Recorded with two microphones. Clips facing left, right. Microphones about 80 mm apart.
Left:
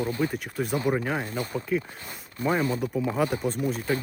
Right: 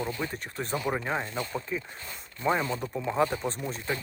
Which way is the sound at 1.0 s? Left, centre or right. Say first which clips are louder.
Left 2 dB; right.